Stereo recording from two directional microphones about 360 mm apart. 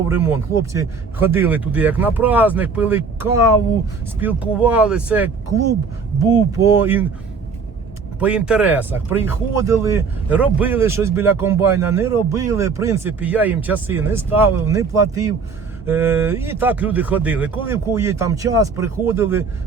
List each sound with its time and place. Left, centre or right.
0.1 s speech: centre
6.3 s speech: centre
8.2 s speech: centre